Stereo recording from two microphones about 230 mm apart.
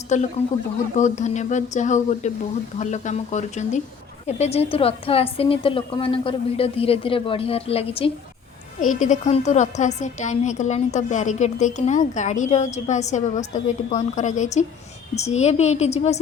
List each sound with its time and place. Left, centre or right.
0.1 s a woman's voice: left